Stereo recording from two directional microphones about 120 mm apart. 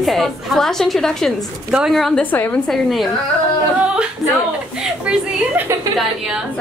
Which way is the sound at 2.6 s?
Centre (ahead or behind).